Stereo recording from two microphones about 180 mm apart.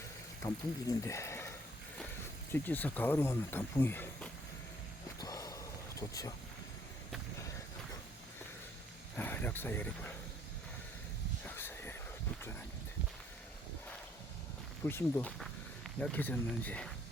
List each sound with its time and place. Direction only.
0.4 s speech: 20° left (ahead or behind)
5.2 s a sound: 20° left (ahead or behind)
6.0 s speech: 20° left (ahead or behind)
9.1 s speech: 10° left (ahead or behind)
11.4 s a sound: 10° left (ahead or behind)
14.8 s speech: 10° left (ahead or behind)